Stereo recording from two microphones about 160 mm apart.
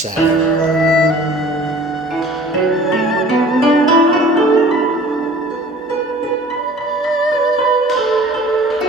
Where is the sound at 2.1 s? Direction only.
Centre (ahead or behind).